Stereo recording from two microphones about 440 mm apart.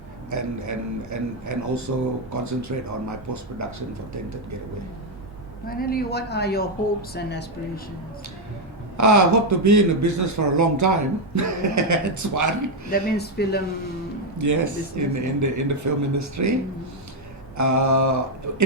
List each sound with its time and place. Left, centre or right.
0.3 s a man's voice: right
5.6 s speech: centre
9.0 s a man's voice: right
12.9 s speech: left
14.3 s a man's voice: right
17.6 s a man's voice: right